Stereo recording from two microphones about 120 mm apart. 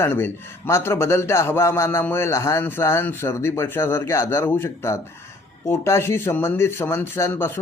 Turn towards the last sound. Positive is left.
turn(degrees=20)  # may be behind; listen again after turning